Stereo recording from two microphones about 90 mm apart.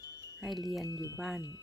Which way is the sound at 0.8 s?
40° left (ahead or behind).